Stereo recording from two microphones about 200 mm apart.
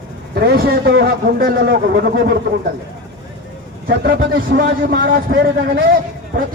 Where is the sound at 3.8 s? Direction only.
50° right (ahead or behind).